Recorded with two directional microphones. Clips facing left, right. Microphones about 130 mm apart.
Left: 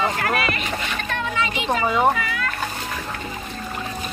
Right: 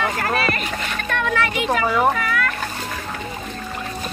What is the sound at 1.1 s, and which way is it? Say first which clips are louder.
Splash: right 5 dB; 60° right (ahead or behind).